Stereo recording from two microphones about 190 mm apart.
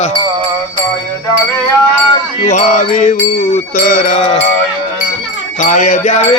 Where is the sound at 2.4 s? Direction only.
40° left (ahead or behind).